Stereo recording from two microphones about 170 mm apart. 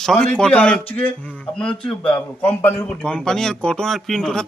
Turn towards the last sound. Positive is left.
turn(degrees=5)  # may be behind; listen again after turning